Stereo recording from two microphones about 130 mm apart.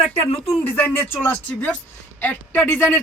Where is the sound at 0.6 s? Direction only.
15° left (ahead or behind).